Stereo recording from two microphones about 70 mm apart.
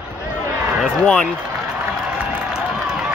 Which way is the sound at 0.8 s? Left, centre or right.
Centre.